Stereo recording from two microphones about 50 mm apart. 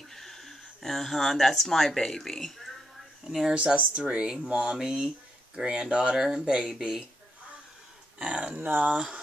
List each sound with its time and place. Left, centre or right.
0.1 s speech: centre
3.3 s speech: centre
3.5 s speech: right
8.2 s speech: centre